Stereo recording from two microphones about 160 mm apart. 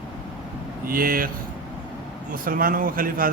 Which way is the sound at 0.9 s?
65° right (ahead or behind).